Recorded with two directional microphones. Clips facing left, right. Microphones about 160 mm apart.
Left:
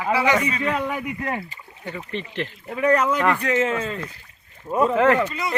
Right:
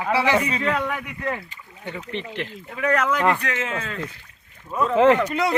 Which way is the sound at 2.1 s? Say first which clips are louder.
Left 1 dB; 15° right (ahead or behind).